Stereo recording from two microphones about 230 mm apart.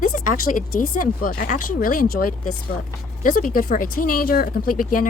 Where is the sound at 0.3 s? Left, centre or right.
Left.